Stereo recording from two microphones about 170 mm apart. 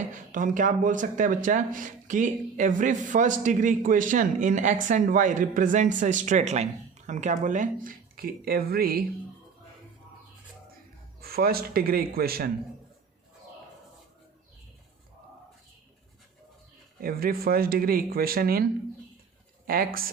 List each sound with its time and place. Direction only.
0.1 s speech: 50° right (ahead or behind)
11.2 s speech: 60° right (ahead or behind)
17.0 s speech: 60° right (ahead or behind)